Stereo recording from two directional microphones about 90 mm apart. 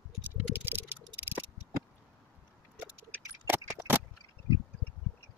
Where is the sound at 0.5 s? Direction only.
20° right (ahead or behind).